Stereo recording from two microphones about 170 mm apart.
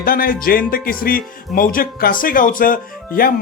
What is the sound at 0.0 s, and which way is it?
Speech, 60° left (ahead or behind).